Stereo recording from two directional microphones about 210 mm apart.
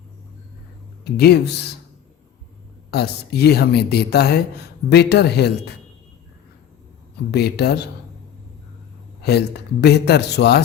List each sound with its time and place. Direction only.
1.0 s speech: 50° left (ahead or behind)
2.9 s speech: 50° left (ahead or behind)
7.3 s speech: 50° left (ahead or behind)
9.2 s speech: 50° left (ahead or behind)